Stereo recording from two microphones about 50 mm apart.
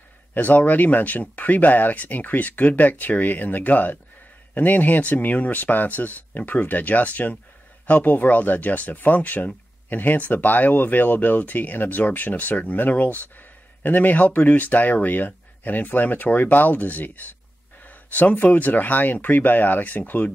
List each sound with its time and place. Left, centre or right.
0.3 s speech: left